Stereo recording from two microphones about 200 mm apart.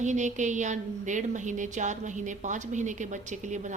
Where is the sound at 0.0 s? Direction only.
35° right (ahead or behind).